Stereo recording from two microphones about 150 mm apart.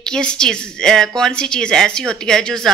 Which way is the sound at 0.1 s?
5° left (ahead or behind).